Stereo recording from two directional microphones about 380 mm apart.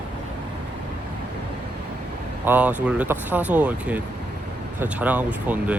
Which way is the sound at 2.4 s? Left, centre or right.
Centre.